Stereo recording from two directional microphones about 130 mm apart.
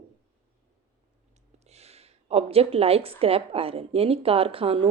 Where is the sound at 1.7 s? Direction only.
55° right (ahead or behind).